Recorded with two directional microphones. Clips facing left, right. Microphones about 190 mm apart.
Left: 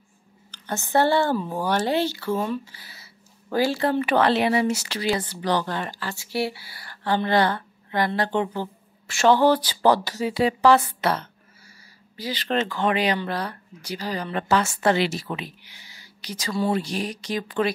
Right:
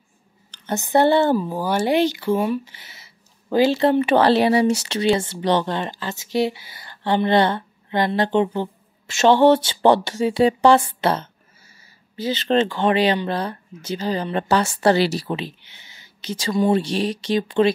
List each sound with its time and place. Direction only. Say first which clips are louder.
0.5 s speech: right 5 dB; 20° right (ahead or behind)
1.4 s speech: right 2 dB; 5° right (ahead or behind); by 17.6 s 25° right (ahead or behind)